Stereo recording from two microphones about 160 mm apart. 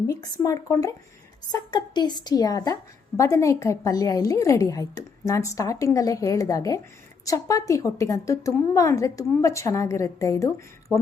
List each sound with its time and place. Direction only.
0.1 s a woman's voice: 20° left (ahead or behind)